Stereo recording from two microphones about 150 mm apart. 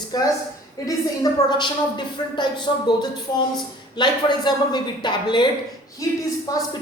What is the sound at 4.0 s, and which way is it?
Speech, 30° left (ahead or behind).